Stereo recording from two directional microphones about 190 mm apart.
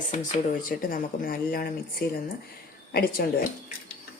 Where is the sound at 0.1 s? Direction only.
40° left (ahead or behind).